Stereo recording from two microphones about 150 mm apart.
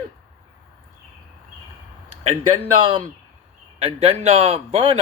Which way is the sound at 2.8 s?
35° right (ahead or behind).